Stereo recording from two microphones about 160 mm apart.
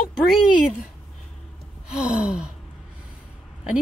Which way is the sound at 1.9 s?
5° right (ahead or behind).